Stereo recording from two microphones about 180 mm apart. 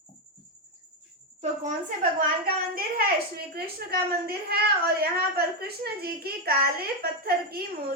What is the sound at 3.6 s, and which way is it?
A woman's voice, 60° right (ahead or behind).